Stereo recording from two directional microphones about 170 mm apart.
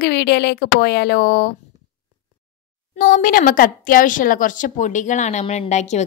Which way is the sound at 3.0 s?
55° left (ahead or behind).